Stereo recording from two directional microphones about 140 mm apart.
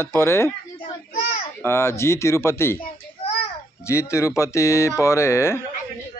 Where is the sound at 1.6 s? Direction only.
20° left (ahead or behind).